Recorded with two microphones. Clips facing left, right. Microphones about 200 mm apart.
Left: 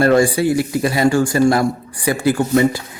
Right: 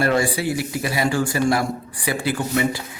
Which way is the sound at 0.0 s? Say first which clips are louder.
Left 7 dB; 45° left (ahead or behind).